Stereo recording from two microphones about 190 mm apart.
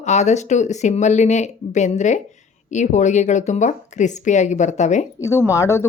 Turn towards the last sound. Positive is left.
turn(degrees=15)  # may be behind; listen again after turning